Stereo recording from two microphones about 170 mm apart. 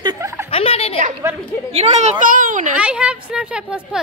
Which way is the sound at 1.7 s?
40° right (ahead or behind).